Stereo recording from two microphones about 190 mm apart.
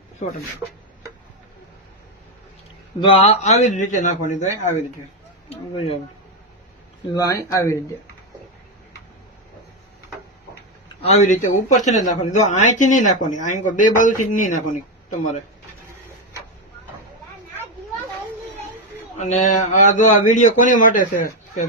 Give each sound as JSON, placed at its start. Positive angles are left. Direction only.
{"t": 0.2, "sound": "speech", "side_deg": 40}
{"t": 3.0, "sound": "speech", "side_deg": 30}
{"t": 7.1, "sound": "speech", "side_deg": 15}
{"t": 11.0, "sound": "speech", "side_deg": 35}
{"t": 19.1, "sound": "speech", "side_deg": 40}